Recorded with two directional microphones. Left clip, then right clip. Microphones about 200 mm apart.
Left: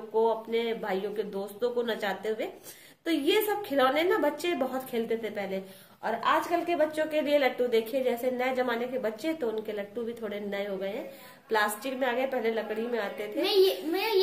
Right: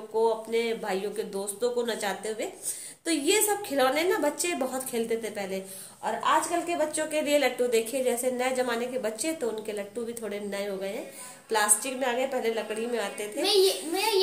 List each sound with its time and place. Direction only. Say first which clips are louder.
0.1 s a woman's voice: right 1 dB; centre (ahead or behind)
13.4 s a child's voice: right 1 dB; 30° left (ahead or behind)